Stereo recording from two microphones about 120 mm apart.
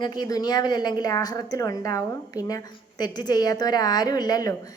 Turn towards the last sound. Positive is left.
turn(degrees=30)  # may be behind; listen again after turning